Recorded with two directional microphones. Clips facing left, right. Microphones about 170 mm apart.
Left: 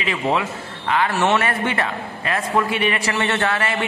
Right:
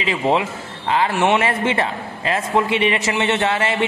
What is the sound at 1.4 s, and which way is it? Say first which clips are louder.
A man's voice: right 3 dB; 25° right (ahead or behind).